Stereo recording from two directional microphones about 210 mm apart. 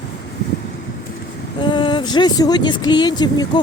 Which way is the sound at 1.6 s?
20° left (ahead or behind).